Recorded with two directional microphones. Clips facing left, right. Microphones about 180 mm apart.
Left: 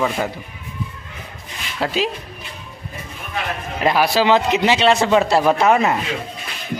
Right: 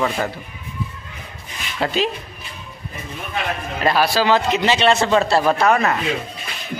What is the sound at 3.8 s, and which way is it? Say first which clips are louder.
Speech: left 1 dB; 15° left (ahead or behind).